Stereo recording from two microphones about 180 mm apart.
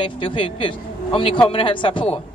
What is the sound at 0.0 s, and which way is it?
A man's voice, 30° left (ahead or behind).